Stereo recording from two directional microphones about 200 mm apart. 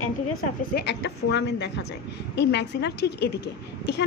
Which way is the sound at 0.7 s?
60° left (ahead or behind).